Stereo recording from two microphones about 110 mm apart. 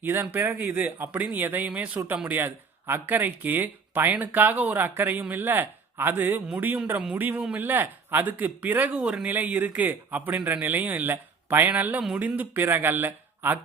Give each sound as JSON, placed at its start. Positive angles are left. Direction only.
{"t": 0.0, "sound": "speech", "side_deg": -20}